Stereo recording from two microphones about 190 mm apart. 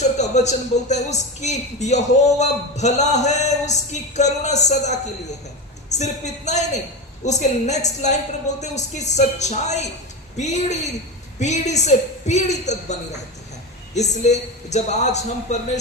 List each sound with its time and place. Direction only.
0.0 s a woman's voice: 35° left (ahead or behind)